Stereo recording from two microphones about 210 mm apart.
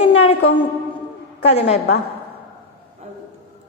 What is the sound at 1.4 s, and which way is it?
Speech, 30° left (ahead or behind).